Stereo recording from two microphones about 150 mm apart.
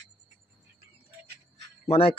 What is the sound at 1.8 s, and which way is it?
Speech, 40° left (ahead or behind).